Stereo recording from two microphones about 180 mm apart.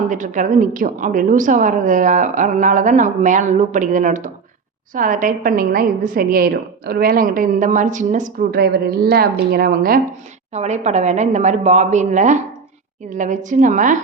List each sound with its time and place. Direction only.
0.1 s a woman's voice: 45° right (ahead or behind)
10.5 s a woman's voice: 40° right (ahead or behind)